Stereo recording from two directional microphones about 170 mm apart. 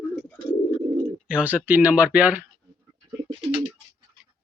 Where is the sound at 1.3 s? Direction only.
10° right (ahead or behind).